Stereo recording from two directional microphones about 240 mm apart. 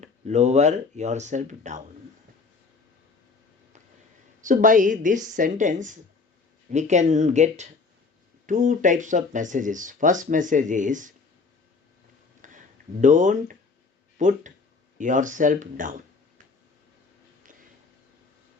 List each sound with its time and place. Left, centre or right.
0.0 s speech: right
4.4 s speech: right
12.4 s a sound: right
13.0 s speech: right